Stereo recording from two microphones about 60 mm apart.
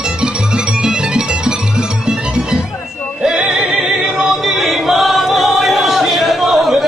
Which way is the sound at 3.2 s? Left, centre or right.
Centre.